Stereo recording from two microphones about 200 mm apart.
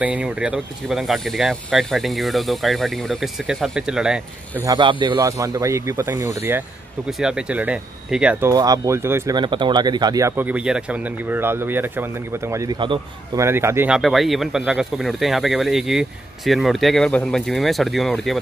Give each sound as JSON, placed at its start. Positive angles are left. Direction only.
{"t": 0.0, "sound": "speech", "side_deg": -5}
{"t": 4.6, "sound": "speech", "side_deg": -25}
{"t": 7.1, "sound": "speech", "side_deg": 0}
{"t": 13.5, "sound": "speech", "side_deg": -10}